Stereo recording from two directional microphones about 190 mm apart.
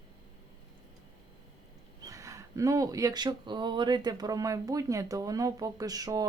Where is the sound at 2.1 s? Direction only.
15° right (ahead or behind).